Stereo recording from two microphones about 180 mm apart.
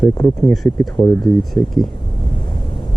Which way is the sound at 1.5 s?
Centre (ahead or behind).